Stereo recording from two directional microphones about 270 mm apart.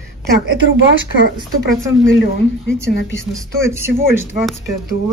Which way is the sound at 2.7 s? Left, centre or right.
Centre.